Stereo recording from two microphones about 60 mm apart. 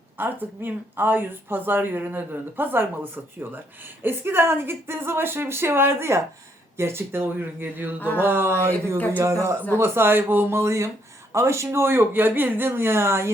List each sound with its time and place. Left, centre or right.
0.2 s a woman's voice: right
7.3 s speech: right
7.9 s a sound: left
8.2 s speech: right
9.2 s speech: right
9.7 s speech: right